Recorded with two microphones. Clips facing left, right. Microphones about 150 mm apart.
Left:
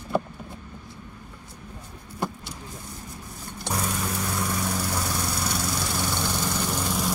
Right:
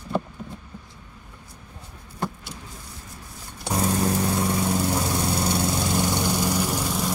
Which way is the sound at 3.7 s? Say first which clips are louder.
Right 6 dB; 35° right (ahead or behind).